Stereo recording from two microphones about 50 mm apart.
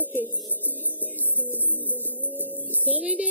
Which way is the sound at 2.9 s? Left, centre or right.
Right.